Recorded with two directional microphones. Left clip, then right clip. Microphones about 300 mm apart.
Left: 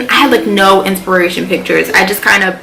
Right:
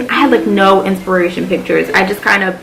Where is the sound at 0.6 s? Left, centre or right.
Right.